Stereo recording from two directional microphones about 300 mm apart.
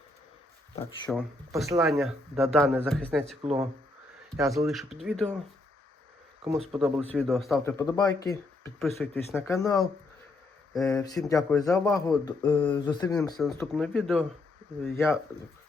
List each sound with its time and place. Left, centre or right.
1.1 s speech: centre
3.4 s speech: centre
4.4 s speech: centre
6.4 s speech: centre
6.7 s speech: centre
13.4 s speech: centre